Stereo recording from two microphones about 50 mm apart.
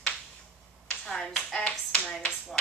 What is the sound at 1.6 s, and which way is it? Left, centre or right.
Speech, left.